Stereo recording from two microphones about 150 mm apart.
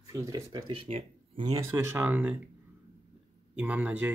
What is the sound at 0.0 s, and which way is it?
Speech, 25° right (ahead or behind).